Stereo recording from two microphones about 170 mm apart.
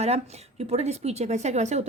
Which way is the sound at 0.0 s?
40° right (ahead or behind).